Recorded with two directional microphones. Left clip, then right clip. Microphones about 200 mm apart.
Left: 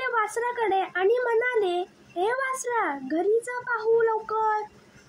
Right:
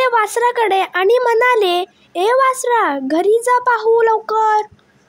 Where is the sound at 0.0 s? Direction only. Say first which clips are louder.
Right 12 dB; 45° right (ahead or behind).